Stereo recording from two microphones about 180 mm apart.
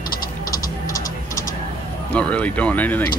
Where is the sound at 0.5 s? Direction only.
20° left (ahead or behind).